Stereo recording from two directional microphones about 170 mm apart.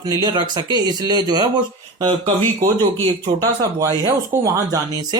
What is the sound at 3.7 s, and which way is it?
Speech, 20° right (ahead or behind).